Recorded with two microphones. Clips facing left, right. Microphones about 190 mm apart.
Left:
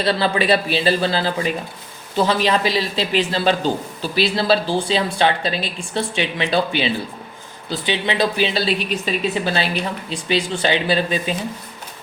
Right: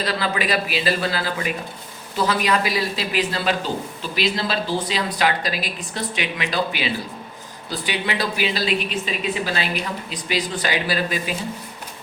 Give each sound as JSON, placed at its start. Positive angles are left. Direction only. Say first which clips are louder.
{"t": 0.0, "sound": "speech", "louder": "left 5 dB", "side_deg": 30}